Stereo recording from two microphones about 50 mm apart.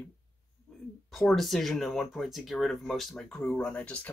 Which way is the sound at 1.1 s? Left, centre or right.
Centre.